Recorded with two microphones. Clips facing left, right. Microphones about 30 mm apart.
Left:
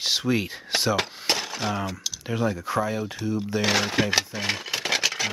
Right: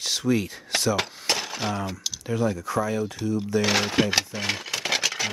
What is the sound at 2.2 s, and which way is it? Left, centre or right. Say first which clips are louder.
Speech: right 1 dB; centre.